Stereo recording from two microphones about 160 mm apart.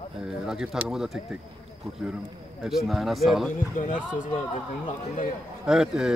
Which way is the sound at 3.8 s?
55° left (ahead or behind).